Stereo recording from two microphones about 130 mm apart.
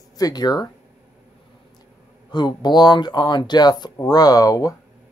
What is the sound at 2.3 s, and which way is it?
Speech, 35° left (ahead or behind).